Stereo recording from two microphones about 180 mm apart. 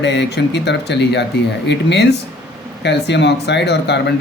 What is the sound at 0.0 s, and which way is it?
Speech, 75° left (ahead or behind).